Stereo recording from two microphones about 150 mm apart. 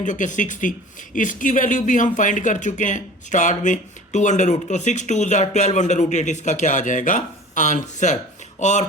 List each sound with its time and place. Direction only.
0.0 s speech: 55° left (ahead or behind)